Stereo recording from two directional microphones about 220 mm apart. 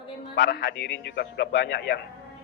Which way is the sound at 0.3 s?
55° left (ahead or behind).